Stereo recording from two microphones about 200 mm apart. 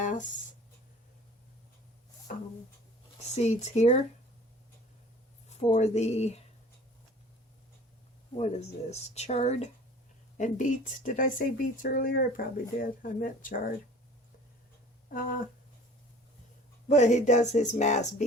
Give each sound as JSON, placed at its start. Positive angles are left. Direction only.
{"t": 0.0, "sound": "a sound", "side_deg": 40}
{"t": 2.3, "sound": "a sound", "side_deg": 40}
{"t": 3.3, "sound": "speech", "side_deg": 35}
{"t": 5.5, "sound": "speech", "side_deg": 35}
{"t": 8.4, "sound": "speech", "side_deg": 35}
{"t": 15.1, "sound": "speech", "side_deg": 45}
{"t": 16.9, "sound": "speech", "side_deg": 35}